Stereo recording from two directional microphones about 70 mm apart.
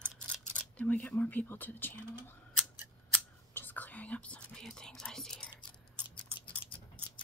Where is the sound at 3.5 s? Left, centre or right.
Left.